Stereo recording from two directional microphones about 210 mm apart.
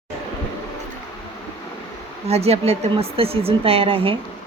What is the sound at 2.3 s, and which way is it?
A woman's voice, 30° right (ahead or behind).